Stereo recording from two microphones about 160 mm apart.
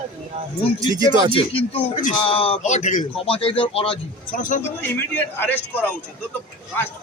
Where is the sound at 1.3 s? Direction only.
35° left (ahead or behind).